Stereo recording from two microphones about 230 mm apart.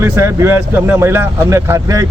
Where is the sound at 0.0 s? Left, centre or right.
Centre.